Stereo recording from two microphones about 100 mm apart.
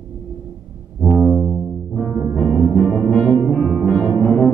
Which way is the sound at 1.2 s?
5° left (ahead or behind).